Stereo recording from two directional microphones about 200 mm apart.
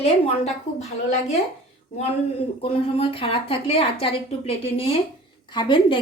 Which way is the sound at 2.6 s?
25° left (ahead or behind).